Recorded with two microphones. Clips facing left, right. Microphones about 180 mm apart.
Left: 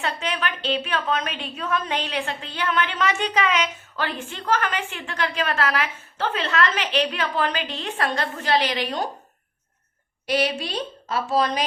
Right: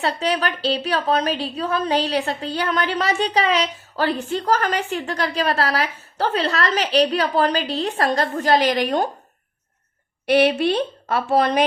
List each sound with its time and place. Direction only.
0.0 s a woman's voice: 35° right (ahead or behind)
10.2 s a woman's voice: 60° right (ahead or behind)